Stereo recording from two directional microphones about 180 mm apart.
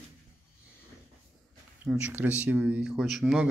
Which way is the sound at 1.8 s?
10° right (ahead or behind).